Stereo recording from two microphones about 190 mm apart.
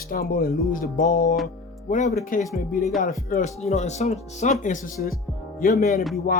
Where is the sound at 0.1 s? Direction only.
50° left (ahead or behind).